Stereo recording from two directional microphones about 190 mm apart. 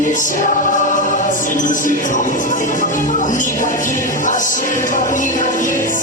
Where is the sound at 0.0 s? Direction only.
45° left (ahead or behind).